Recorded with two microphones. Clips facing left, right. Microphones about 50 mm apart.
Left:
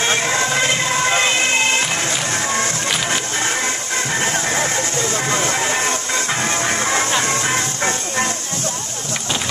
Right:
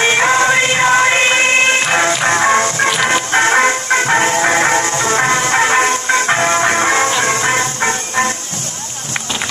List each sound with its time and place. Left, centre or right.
0.2 s music: right